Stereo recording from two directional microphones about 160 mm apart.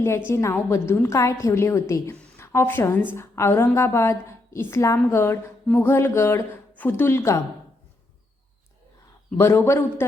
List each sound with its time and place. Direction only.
0.3 s a woman's voice: 15° left (ahead or behind)
9.4 s a woman's voice: 15° left (ahead or behind)